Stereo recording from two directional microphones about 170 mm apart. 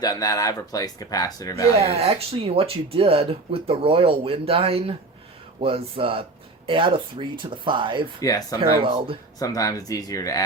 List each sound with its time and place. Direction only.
0.0 s speech: 20° left (ahead or behind)
1.9 s speech: 35° right (ahead or behind)
8.2 s speech: 20° left (ahead or behind)
8.8 s speech: 30° right (ahead or behind)
9.4 s speech: 20° left (ahead or behind)